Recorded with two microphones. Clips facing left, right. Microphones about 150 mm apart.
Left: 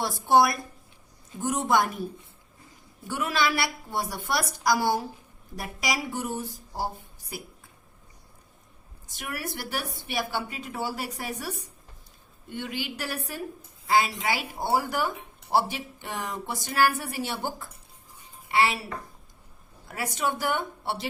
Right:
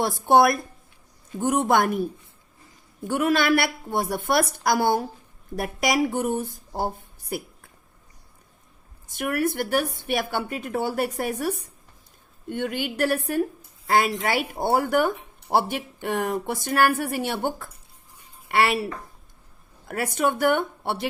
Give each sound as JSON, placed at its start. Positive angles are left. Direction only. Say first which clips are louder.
{"t": 0.0, "sound": "speech", "louder": "right 3 dB", "side_deg": -55}
{"t": 3.1, "sound": "speech", "louder": "right 6 dB", "side_deg": -55}
{"t": 9.0, "sound": "a woman's voice", "louder": "right 11 dB", "side_deg": -55}
{"t": 19.9, "sound": "speech", "louder": "right 5 dB", "side_deg": -55}